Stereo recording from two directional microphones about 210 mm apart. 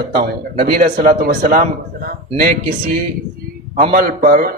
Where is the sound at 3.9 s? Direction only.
40° right (ahead or behind).